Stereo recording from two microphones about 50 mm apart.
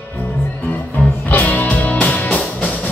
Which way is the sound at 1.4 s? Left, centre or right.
Left.